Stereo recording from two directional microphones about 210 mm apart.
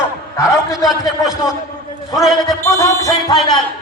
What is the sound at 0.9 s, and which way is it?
A man's voice, centre (ahead or behind).